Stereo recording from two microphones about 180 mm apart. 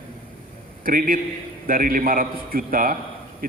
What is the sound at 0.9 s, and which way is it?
A man's voice, 50° right (ahead or behind).